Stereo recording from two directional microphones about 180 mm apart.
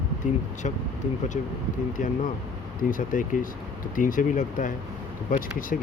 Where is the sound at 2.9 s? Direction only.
45° left (ahead or behind).